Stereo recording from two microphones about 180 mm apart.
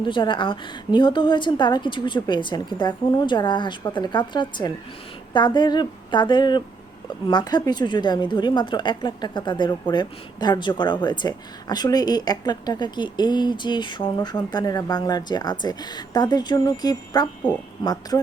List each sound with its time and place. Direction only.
0.0 s a woman's voice: 25° left (ahead or behind)